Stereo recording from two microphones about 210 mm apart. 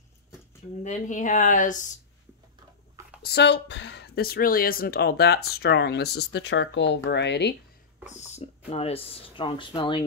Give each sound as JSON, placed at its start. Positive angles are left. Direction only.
{"t": 0.8, "sound": "speech", "side_deg": 35}
{"t": 3.2, "sound": "speech", "side_deg": 50}
{"t": 8.1, "sound": "speech", "side_deg": 35}